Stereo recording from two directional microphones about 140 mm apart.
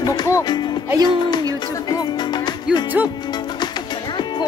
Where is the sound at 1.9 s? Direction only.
30° left (ahead or behind).